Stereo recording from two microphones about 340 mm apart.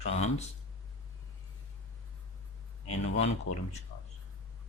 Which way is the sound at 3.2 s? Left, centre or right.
Centre.